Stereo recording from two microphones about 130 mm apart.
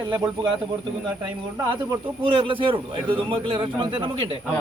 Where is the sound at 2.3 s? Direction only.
45° right (ahead or behind).